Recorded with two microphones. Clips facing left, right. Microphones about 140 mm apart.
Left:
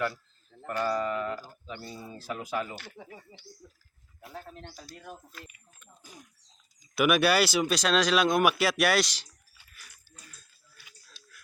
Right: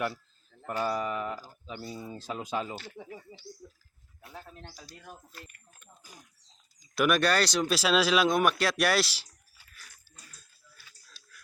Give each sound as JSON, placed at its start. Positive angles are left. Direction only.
{"t": 0.8, "sound": "a sound", "side_deg": -15}
{"t": 1.6, "sound": "speech", "side_deg": -15}
{"t": 6.9, "sound": "speech", "side_deg": 5}